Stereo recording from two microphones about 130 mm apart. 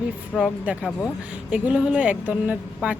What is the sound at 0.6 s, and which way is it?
Speech, 10° right (ahead or behind).